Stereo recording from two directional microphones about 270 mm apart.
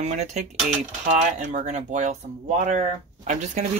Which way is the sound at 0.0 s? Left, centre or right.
Right.